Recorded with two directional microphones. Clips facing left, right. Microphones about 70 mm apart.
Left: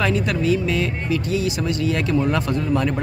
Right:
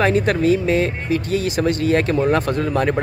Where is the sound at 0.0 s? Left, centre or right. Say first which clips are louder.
Right 4 dB; right.